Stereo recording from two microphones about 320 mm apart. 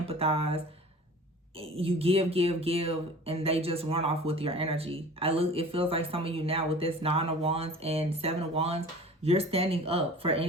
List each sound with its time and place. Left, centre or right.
0.0 s speech: centre